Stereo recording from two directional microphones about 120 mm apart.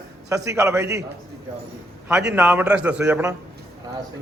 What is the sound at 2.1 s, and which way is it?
A man's voice, 10° right (ahead or behind).